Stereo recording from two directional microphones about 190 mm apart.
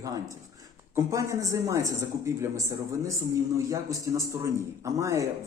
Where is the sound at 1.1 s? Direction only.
15° right (ahead or behind).